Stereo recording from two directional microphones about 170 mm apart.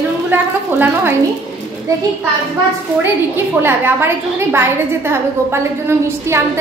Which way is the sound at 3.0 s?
10° right (ahead or behind).